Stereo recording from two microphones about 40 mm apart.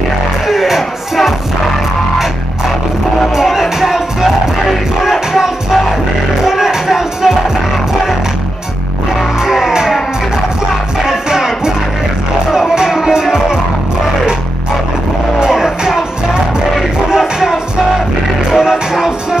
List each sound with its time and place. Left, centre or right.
0.5 s music: centre
3.3 s music: centre
9.4 s music: centre
11.1 s music: centre
15.3 s music: centre
17.1 s music: centre